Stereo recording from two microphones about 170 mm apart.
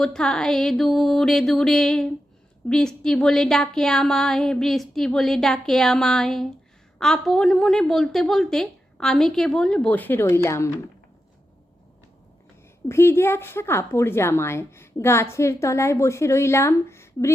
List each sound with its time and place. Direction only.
0.0 s speech: 5° left (ahead or behind)
12.9 s speech: 15° left (ahead or behind)